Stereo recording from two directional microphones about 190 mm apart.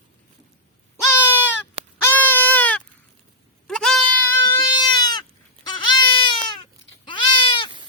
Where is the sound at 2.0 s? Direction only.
10° left (ahead or behind).